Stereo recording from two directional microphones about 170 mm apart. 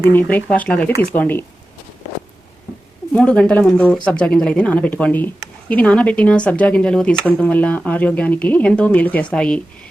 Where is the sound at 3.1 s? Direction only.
5° left (ahead or behind).